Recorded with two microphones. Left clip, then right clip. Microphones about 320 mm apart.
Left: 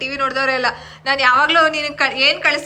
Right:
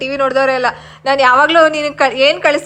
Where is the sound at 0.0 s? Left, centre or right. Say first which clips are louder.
Right 5 dB; centre.